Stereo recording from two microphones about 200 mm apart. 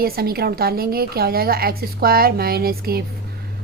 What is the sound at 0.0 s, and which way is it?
Speech, 50° right (ahead or behind).